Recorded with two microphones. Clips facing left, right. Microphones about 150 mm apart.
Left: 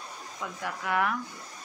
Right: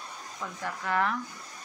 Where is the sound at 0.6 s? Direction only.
10° left (ahead or behind).